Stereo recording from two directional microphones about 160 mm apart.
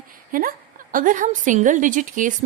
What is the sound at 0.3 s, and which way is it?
A woman's voice, 60° right (ahead or behind).